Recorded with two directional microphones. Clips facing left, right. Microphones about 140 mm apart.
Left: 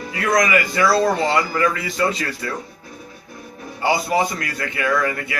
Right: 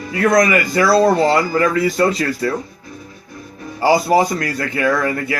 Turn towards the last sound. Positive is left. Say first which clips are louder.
# right 3 dB
turn(degrees=-35)  # may be behind; listen again after turning